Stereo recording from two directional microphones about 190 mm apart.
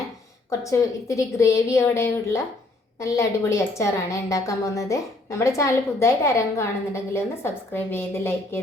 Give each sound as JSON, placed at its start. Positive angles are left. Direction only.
{"t": 0.6, "sound": "a woman's voice", "side_deg": 15}